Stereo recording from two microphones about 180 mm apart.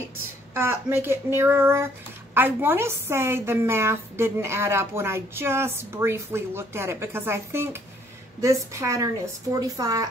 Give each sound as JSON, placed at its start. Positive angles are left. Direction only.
{"t": 0.6, "sound": "a woman's voice", "side_deg": -15}